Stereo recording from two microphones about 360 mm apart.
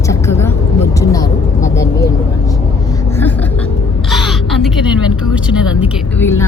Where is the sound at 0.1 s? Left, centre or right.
Centre.